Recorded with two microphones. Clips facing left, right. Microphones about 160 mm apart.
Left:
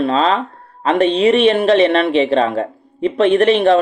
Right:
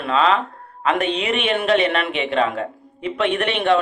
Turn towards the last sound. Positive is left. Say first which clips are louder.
# left 7 dB
turn(degrees=35)  # may be behind; listen again after turning